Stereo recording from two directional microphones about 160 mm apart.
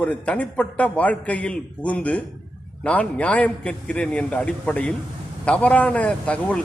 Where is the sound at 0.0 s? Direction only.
10° left (ahead or behind).